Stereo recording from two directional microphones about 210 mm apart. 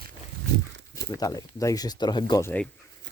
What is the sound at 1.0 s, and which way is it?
Speech, 15° left (ahead or behind).